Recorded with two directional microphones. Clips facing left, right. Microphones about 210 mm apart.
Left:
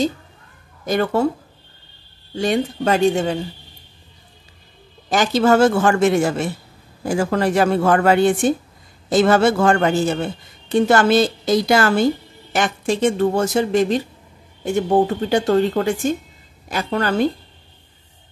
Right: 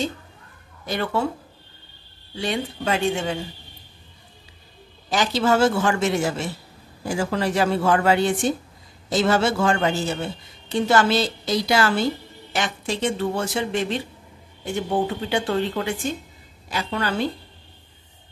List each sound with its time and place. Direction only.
0.8 s speech: 45° left (ahead or behind)
2.3 s speech: 45° left (ahead or behind)
5.1 s speech: 50° left (ahead or behind)